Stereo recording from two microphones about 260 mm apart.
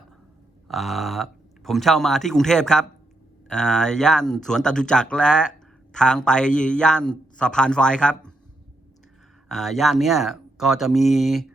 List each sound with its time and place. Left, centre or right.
0.7 s speech: centre
9.5 s speech: centre